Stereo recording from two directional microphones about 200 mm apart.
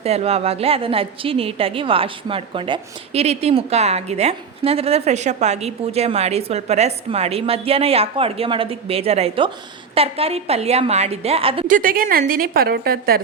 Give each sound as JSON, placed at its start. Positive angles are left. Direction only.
{"t": 0.0, "sound": "a woman's voice", "side_deg": -30}
{"t": 11.7, "sound": "a woman's voice", "side_deg": -45}